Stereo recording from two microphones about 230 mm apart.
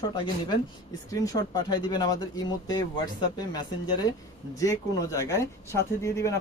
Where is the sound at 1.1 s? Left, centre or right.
Centre.